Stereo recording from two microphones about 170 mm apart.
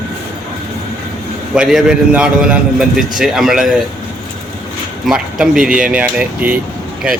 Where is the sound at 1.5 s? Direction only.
5° right (ahead or behind).